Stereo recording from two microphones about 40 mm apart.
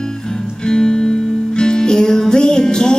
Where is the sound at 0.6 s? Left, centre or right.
Centre.